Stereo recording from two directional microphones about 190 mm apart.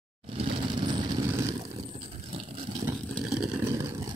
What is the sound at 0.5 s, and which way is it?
Vehicle, 25° right (ahead or behind).